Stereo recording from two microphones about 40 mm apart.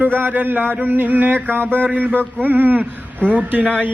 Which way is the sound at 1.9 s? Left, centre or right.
Right.